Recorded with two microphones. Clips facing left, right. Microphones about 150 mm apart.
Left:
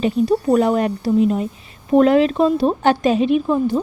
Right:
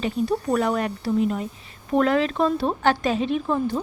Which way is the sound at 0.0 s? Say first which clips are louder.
Left 7 dB; 20° left (ahead or behind).